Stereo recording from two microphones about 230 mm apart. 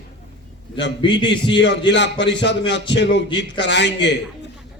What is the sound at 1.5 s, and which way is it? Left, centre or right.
A man's voice, left.